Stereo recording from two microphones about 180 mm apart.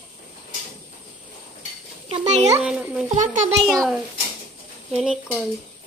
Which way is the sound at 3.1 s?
45° right (ahead or behind).